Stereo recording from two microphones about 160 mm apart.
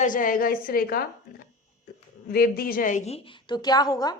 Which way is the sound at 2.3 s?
70° left (ahead or behind).